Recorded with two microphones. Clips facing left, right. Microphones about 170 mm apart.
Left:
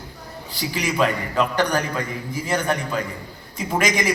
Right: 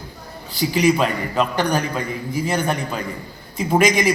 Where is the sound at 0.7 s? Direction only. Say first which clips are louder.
Right 4 dB; 20° right (ahead or behind).